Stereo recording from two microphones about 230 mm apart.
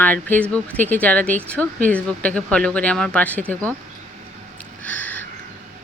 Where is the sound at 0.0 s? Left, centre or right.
Centre.